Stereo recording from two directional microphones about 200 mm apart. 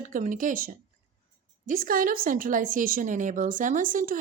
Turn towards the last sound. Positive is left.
turn(degrees=-40)  # may be behind; listen again after turning